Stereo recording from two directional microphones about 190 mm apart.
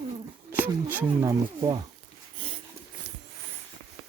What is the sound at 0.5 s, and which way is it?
Speech, 10° right (ahead or behind).